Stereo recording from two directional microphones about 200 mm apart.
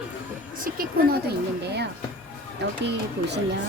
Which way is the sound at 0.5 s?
45° right (ahead or behind).